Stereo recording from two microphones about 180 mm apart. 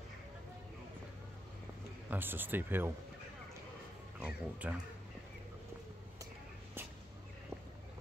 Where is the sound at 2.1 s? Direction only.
10° right (ahead or behind).